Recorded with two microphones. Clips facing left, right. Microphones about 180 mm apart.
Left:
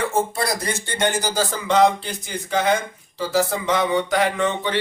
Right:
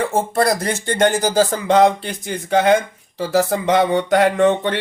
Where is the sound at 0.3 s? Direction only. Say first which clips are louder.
Right 7 dB; 50° right (ahead or behind).